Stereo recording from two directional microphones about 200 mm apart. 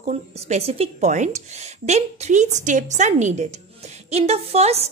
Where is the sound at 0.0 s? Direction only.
35° right (ahead or behind).